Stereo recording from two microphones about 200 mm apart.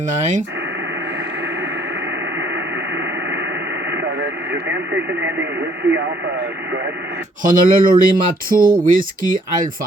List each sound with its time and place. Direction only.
2.9 s radio: 65° right (ahead or behind)
4.7 s speech: 65° right (ahead or behind)
7.4 s speech: 45° right (ahead or behind)